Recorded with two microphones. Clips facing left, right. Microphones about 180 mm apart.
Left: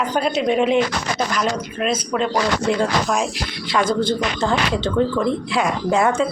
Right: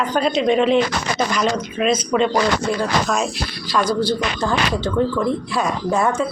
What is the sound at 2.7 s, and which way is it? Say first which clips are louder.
A woman's voice: left 1 dB; 15° left (ahead or behind).